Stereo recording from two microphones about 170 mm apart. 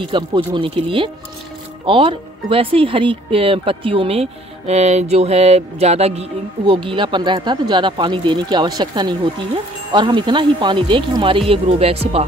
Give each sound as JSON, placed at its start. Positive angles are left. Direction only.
{"t": 0.1, "sound": "speech", "side_deg": -30}